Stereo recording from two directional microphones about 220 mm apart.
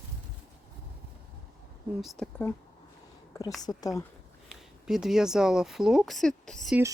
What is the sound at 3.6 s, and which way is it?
Speech, 15° left (ahead or behind).